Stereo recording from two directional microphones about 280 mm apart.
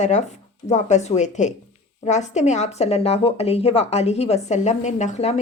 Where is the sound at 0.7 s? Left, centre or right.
Left.